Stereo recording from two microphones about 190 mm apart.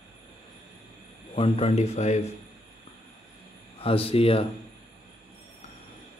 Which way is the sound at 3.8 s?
30° left (ahead or behind).